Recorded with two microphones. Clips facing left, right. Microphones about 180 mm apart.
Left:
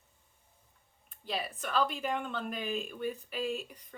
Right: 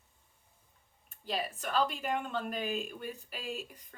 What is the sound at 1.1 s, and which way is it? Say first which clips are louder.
Speech: right 1 dB; 45° right (ahead or behind).